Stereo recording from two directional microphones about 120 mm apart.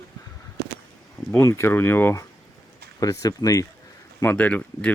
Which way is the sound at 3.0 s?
30° left (ahead or behind).